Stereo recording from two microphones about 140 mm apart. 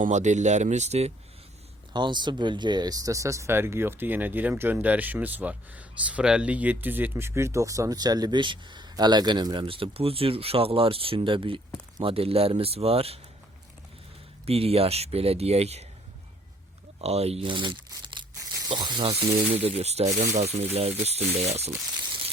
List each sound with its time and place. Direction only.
0.0 s speech: 60° right (ahead or behind)
1.9 s speech: 35° right (ahead or behind)
14.4 s speech: 45° right (ahead or behind)
17.0 s speech: 50° right (ahead or behind); by 19.1 s 30° right (ahead or behind)
19.6 s speech: 50° right (ahead or behind)